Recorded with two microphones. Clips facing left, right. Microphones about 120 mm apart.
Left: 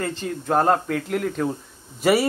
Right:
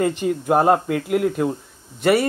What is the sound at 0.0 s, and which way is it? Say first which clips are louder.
Speech: right 7 dB; 15° right (ahead or behind).